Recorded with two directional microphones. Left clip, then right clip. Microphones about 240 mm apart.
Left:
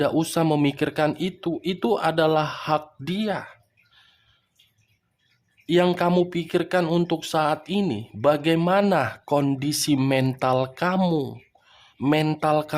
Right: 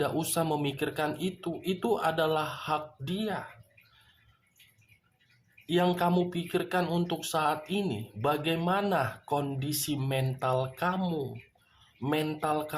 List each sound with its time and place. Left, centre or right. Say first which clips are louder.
0.0 s speech: left 8 dB; left
5.6 s speech: left 7 dB; left